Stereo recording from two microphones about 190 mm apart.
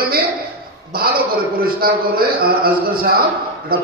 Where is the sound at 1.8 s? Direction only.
50° right (ahead or behind).